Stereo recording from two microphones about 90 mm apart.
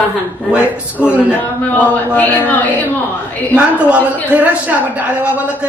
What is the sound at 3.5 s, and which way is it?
A man's voice, 15° right (ahead or behind).